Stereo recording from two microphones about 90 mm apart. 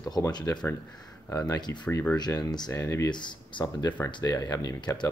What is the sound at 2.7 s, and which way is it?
Speech, 35° left (ahead or behind).